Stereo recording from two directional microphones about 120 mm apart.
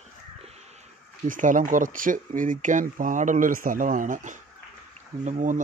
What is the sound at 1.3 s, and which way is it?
Speech, 90° right.